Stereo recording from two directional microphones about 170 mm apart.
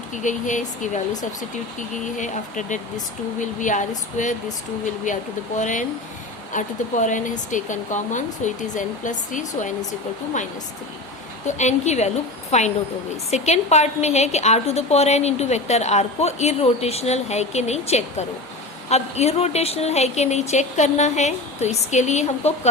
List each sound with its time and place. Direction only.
0.1 s speech: 45° left (ahead or behind)
2.1 s speech: 45° left (ahead or behind)
5.5 s speech: 45° left (ahead or behind)
11.4 s a woman's voice: 45° left (ahead or behind)